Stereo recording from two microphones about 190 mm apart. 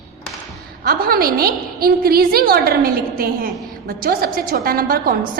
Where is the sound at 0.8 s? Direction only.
50° right (ahead or behind).